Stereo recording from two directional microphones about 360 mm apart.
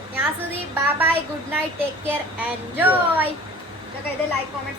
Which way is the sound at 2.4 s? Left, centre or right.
Centre.